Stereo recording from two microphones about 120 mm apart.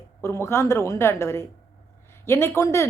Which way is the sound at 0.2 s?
20° left (ahead or behind).